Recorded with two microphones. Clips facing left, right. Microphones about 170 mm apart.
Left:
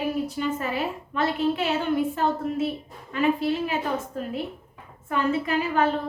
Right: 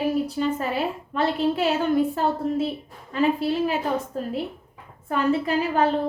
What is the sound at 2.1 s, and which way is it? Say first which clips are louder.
A woman's voice: right 2 dB; 35° right (ahead or behind).